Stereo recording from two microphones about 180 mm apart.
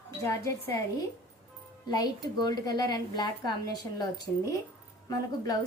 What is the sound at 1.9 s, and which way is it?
A woman's voice, 20° left (ahead or behind).